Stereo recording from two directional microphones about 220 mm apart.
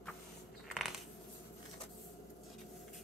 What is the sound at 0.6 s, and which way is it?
Coin, centre (ahead or behind).